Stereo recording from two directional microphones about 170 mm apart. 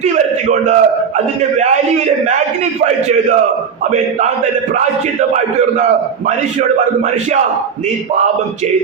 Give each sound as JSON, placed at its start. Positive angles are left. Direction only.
{"t": 0.6, "sound": "a man's voice", "side_deg": -45}
{"t": 2.8, "sound": "a man's voice", "side_deg": -45}